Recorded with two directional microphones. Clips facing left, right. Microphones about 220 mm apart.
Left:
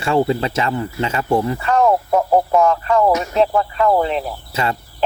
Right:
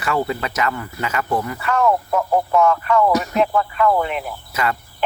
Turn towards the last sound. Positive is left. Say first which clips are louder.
# left 1 dB
turn(degrees=30)  # may be behind; listen again after turning